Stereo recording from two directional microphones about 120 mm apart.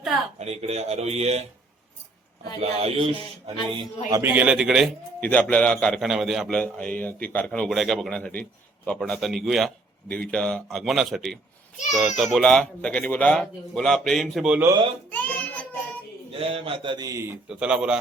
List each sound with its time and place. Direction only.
0.3 s speech: 65° right (ahead or behind)
2.6 s music: 55° right (ahead or behind)
4.4 s a child's voice: 5° right (ahead or behind)
5.2 s a child's voice: 10° left (ahead or behind)
6.6 s a man's voice: 10° left (ahead or behind)
15.1 s child singing: 15° left (ahead or behind)
16.4 s music: 50° right (ahead or behind)
17.1 s a man's voice: 25° right (ahead or behind)
17.5 s a man's voice: 5° right (ahead or behind)